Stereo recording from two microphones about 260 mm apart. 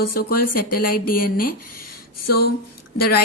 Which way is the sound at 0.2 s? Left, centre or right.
Left.